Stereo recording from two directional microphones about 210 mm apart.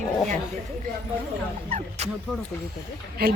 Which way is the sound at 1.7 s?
35° right (ahead or behind).